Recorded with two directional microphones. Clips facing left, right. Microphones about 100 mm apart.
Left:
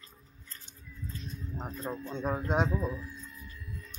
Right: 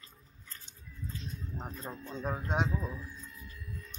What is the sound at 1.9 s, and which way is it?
Speech, 15° left (ahead or behind).